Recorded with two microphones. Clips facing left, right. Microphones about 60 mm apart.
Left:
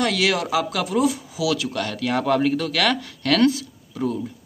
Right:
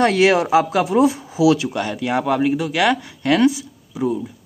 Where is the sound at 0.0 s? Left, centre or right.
Right.